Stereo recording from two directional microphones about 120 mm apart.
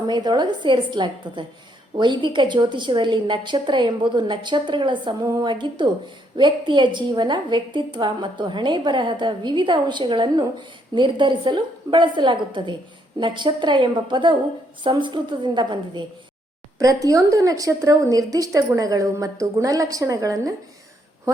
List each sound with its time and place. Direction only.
0.1 s a woman's voice: 40° right (ahead or behind)
16.7 s speech: 30° right (ahead or behind)